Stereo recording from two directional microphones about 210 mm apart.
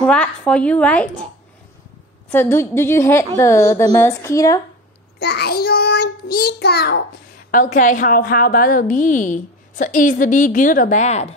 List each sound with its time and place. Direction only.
0.0 s speech: 5° left (ahead or behind)
2.3 s speech: 10° left (ahead or behind)
5.2 s child singing: 50° left (ahead or behind)
7.5 s a woman's voice: 40° left (ahead or behind)